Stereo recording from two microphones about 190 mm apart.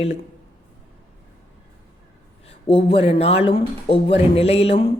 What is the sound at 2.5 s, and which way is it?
Speech, 30° left (ahead or behind).